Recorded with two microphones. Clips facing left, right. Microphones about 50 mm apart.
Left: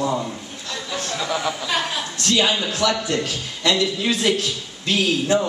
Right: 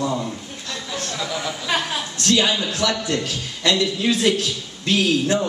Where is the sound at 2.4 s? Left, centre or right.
Centre.